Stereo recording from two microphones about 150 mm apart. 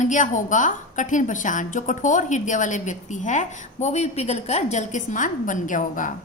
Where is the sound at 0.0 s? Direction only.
55° left (ahead or behind).